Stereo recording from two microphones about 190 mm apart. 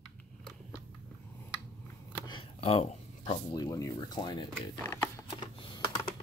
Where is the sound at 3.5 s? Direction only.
20° left (ahead or behind).